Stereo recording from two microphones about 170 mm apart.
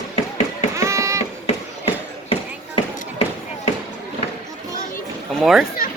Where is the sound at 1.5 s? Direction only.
35° left (ahead or behind).